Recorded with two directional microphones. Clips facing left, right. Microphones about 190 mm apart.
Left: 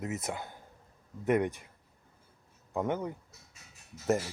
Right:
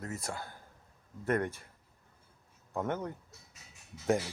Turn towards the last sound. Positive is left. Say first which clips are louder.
# left 1 dB
turn(degrees=5)  # may be behind; listen again after turning